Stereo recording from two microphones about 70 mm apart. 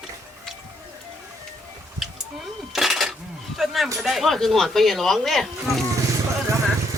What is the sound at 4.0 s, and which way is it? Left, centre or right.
Speech, centre.